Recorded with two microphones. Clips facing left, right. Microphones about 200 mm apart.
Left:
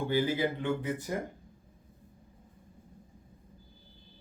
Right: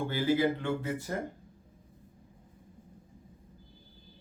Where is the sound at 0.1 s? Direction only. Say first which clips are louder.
Right 2 dB; 15° left (ahead or behind).